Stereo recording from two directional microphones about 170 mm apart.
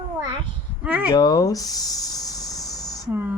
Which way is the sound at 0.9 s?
10° right (ahead or behind).